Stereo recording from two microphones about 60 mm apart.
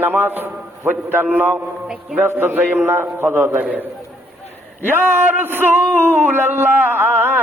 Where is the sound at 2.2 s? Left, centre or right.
Right.